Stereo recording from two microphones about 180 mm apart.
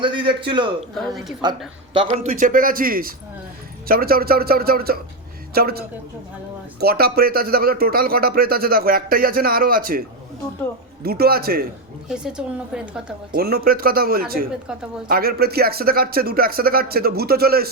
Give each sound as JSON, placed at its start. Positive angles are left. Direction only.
{"t": 0.0, "sound": "speech", "side_deg": -25}
{"t": 0.9, "sound": "a woman's voice", "side_deg": 0}
{"t": 1.4, "sound": "speech", "side_deg": -25}
{"t": 2.4, "sound": "speech", "side_deg": -50}
{"t": 11.0, "sound": "speech", "side_deg": -60}
{"t": 12.0, "sound": "a woman's voice", "side_deg": -5}
{"t": 13.3, "sound": "speech", "side_deg": -55}